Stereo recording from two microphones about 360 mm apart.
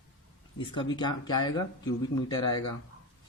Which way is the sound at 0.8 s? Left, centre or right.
Centre.